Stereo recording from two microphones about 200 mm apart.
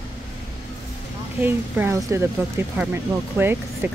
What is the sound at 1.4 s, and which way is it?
Speech, 10° right (ahead or behind).